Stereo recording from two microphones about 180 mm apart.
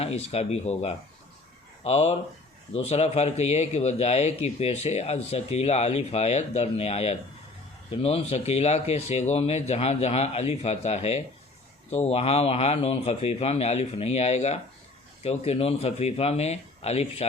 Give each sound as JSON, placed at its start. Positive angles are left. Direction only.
{"t": 0.0, "sound": "a man's voice", "side_deg": 35}